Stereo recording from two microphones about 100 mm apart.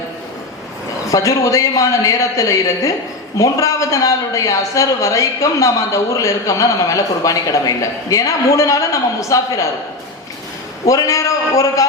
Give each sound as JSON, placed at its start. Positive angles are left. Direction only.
{"t": 1.1, "sound": "a man's voice", "side_deg": 35}
{"t": 10.8, "sound": "a man's voice", "side_deg": 35}